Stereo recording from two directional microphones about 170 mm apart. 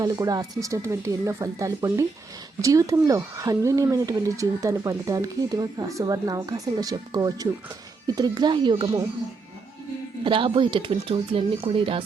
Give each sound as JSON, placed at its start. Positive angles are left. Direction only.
{"t": 0.0, "sound": "speech", "side_deg": -25}
{"t": 10.2, "sound": "speech", "side_deg": -30}